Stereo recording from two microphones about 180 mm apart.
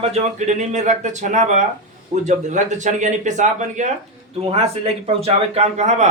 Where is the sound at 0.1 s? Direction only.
40° right (ahead or behind).